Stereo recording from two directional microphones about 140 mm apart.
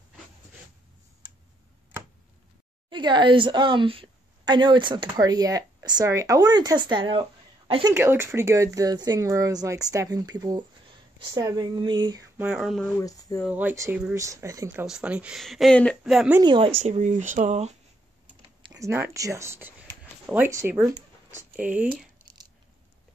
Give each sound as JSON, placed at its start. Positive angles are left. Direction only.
{"t": 2.9, "sound": "a woman's voice", "side_deg": -35}
{"t": 7.9, "sound": "speech", "side_deg": -15}
{"t": 12.4, "sound": "speech", "side_deg": -5}
{"t": 13.5, "sound": "speech", "side_deg": -15}
{"t": 14.9, "sound": "speech", "side_deg": -5}
{"t": 16.0, "sound": "speech", "side_deg": -5}
{"t": 16.3, "sound": "speech", "side_deg": -35}
{"t": 17.0, "sound": "speech", "side_deg": -60}
{"t": 18.7, "sound": "speech", "side_deg": -20}